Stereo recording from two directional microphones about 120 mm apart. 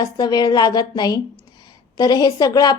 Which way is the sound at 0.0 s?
35° left (ahead or behind).